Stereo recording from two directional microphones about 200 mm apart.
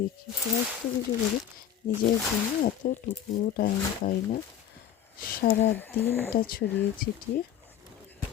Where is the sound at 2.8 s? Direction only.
45° left (ahead or behind).